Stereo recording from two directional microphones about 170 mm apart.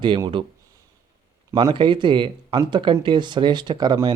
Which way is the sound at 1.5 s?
30° right (ahead or behind).